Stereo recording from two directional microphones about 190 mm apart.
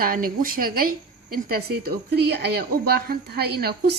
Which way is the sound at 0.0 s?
50° right (ahead or behind).